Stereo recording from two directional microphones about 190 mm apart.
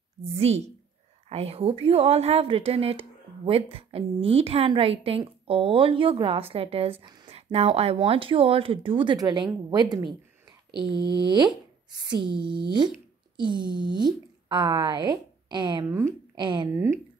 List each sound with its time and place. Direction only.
1.3 s a woman's voice: 30° right (ahead or behind); by 16.2 s 15° right (ahead or behind)
16.3 s speech: 25° right (ahead or behind)
16.7 s speech: 15° right (ahead or behind)